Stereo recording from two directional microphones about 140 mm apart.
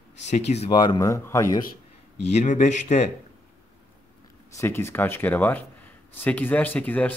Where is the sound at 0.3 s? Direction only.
55° left (ahead or behind).